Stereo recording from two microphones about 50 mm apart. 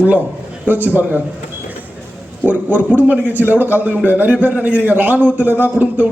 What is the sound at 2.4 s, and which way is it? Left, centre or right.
A man's voice, right.